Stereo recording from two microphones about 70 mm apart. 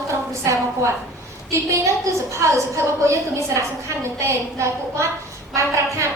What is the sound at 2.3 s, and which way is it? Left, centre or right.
A woman's voice, right.